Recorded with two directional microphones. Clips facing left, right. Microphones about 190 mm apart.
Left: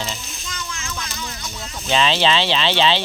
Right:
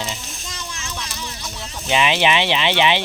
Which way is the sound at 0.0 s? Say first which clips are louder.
Even; 15° right (ahead or behind).